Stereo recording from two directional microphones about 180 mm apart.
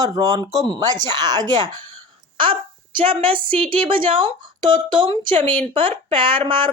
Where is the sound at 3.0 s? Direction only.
30° right (ahead or behind).